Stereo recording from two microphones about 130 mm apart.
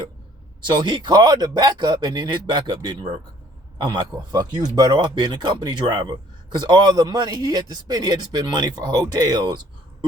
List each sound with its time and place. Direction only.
0.7 s speech: 35° right (ahead or behind)